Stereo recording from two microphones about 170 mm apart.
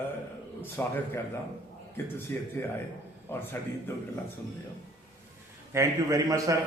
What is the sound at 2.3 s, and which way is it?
A man's voice, 15° left (ahead or behind).